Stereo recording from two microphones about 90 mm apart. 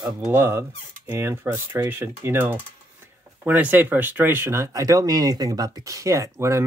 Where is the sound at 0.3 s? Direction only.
25° right (ahead or behind).